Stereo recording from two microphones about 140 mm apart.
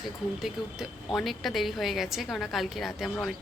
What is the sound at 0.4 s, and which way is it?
A woman's voice, centre (ahead or behind).